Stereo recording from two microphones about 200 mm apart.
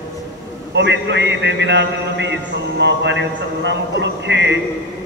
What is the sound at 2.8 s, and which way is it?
A man's voice, 60° right (ahead or behind).